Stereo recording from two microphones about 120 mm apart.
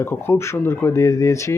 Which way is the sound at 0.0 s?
20° left (ahead or behind).